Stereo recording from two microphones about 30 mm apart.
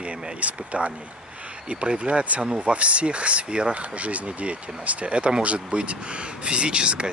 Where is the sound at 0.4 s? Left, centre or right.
Right.